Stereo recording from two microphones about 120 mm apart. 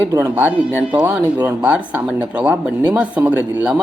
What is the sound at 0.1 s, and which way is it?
Speech, 20° right (ahead or behind).